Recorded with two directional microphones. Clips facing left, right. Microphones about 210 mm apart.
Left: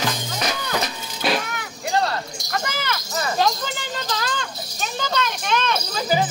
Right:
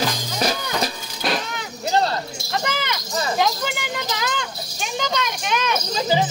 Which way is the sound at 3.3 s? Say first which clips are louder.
Left 1 dB; 15° right (ahead or behind).